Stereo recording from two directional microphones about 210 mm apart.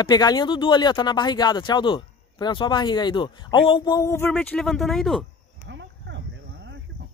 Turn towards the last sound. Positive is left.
turn(degrees=-60)  # may be behind; listen again after turning